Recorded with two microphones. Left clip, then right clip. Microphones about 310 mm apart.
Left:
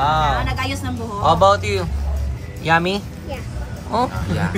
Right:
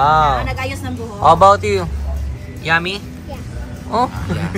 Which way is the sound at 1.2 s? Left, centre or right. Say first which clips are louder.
Right 5 dB; centre.